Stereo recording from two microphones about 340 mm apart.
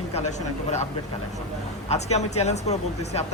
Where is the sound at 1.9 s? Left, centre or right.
Centre.